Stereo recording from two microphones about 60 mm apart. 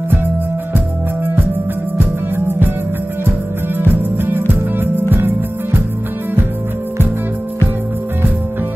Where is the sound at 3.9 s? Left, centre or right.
Right.